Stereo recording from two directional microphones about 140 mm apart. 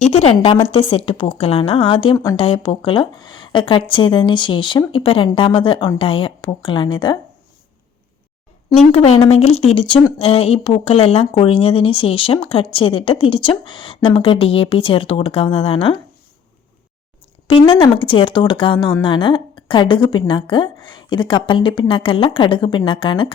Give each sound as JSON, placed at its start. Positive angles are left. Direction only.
{"t": 0.0, "sound": "a woman's voice", "side_deg": 50}
{"t": 9.0, "sound": "a woman's voice", "side_deg": 45}
{"t": 17.5, "sound": "a woman's voice", "side_deg": 35}